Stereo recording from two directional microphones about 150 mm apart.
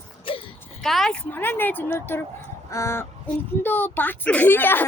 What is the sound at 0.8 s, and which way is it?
Speech, centre (ahead or behind).